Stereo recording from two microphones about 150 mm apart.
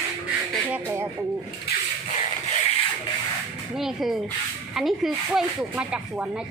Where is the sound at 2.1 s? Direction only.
50° left (ahead or behind).